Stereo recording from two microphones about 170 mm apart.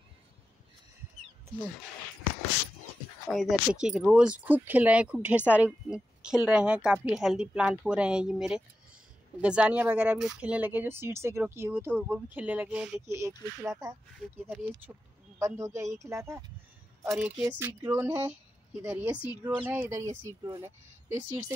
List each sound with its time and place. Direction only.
3.3 s a woman's voice: centre (ahead or behind)
15.3 s a woman's voice: 15° right (ahead or behind)
17.0 s a woman's voice: 5° right (ahead or behind)